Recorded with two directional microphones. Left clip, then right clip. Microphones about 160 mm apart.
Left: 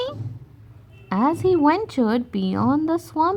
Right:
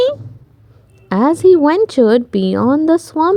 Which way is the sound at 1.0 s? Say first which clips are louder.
Right 9 dB; 35° right (ahead or behind).